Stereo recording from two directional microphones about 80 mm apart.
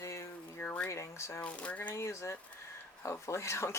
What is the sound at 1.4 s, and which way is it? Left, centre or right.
Speech, centre.